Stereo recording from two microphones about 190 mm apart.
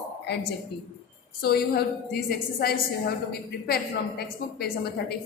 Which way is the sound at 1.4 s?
55° left (ahead or behind).